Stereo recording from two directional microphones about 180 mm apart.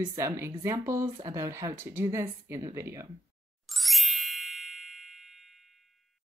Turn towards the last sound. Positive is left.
turn(degrees=0)  # may be behind; listen again after turning